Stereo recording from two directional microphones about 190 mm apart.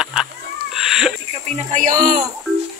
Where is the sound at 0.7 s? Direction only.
Centre (ahead or behind).